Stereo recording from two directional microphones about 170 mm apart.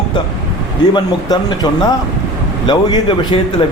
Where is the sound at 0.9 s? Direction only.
25° left (ahead or behind).